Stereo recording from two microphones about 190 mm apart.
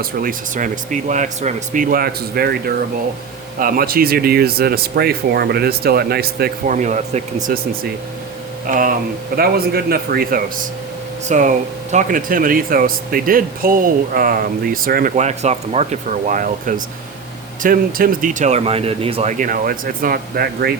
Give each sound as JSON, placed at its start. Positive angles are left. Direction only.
{"t": 0.0, "sound": "speech", "side_deg": -50}
{"t": 6.7, "sound": "speech", "side_deg": -40}